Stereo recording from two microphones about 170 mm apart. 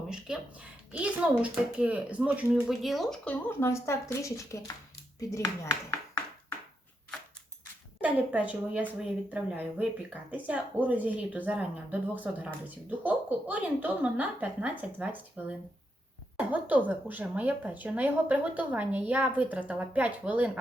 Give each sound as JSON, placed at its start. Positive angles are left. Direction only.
{"t": 0.3, "sound": "speech", "side_deg": -5}
{"t": 3.6, "sound": "speech", "side_deg": 15}
{"t": 8.0, "sound": "speech", "side_deg": -10}